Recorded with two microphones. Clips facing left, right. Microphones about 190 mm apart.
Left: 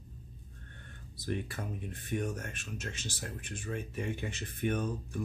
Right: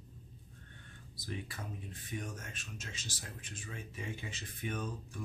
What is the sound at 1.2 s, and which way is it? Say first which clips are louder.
Speech: left 7 dB; 60° left (ahead or behind).